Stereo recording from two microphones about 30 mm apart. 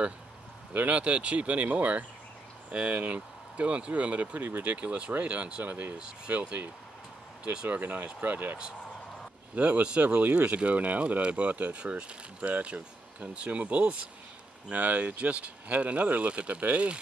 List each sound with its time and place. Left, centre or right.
0.9 s speech: right
2.7 s speech: right
4.5 s speech: right
4.7 s speech: right
5.6 s speech: right
6.3 s speech: right
7.6 s speech: right
9.6 s speech: right
11.0 s speech: right
11.3 s speech: right
11.7 s speech: right